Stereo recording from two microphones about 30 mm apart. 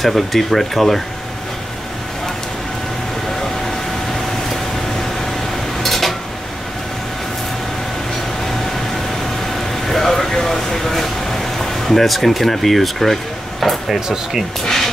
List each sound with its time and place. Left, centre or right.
0.0 s speech: centre
5.8 s cutlery: centre
9.8 s a sound: centre
13.8 s speech: centre